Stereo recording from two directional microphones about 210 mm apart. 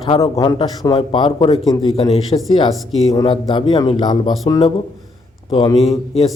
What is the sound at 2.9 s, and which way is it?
Speech, centre (ahead or behind).